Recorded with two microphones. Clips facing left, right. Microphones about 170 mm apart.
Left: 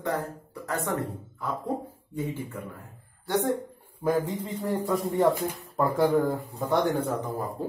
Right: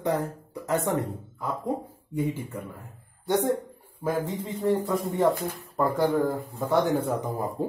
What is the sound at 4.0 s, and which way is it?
Speech, centre (ahead or behind).